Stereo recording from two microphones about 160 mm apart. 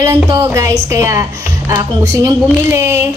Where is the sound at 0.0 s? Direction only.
20° right (ahead or behind).